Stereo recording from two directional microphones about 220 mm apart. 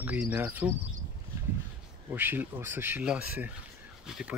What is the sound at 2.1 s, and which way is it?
Speech, 10° right (ahead or behind).